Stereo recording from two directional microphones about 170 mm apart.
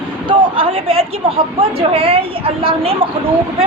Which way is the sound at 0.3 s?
30° right (ahead or behind).